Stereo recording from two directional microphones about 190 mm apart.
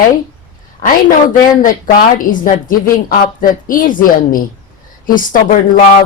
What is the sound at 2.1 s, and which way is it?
Speech, 45° left (ahead or behind).